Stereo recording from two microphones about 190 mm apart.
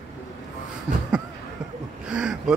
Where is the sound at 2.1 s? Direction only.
5° right (ahead or behind).